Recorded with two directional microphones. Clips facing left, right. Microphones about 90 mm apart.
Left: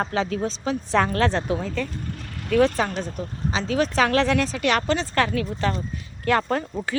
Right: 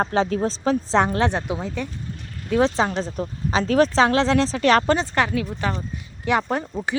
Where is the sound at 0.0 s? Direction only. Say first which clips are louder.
Right 3 dB; 35° right (ahead or behind).